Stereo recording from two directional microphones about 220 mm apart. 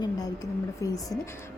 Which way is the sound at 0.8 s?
15° left (ahead or behind).